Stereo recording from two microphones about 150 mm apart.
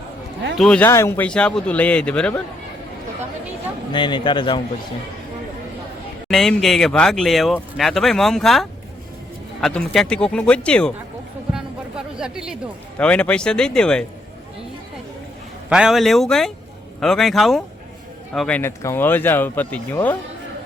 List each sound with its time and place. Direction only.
0.5 s speech: 5° left (ahead or behind)
0.9 s speech: 20° left (ahead or behind)
3.9 s a man's voice: 30° left (ahead or behind)
6.2 s speech: 5° left (ahead or behind)
11.5 s music: 5° right (ahead or behind)
13.0 s speech: 10° left (ahead or behind)
15.7 s speech: 5° right (ahead or behind)